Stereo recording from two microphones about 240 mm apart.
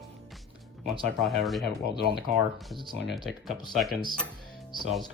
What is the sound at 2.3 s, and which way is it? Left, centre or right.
Speech, centre.